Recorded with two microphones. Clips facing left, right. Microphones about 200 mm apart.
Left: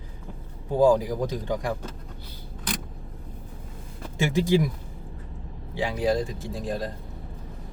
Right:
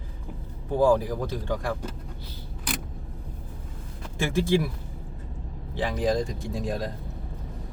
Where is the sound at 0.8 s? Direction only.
15° left (ahead or behind).